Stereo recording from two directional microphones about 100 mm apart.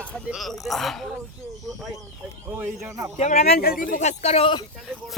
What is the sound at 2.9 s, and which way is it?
Speech, 30° right (ahead or behind).